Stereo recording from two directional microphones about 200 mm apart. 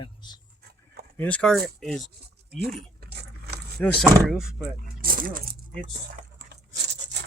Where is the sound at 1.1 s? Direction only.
10° left (ahead or behind).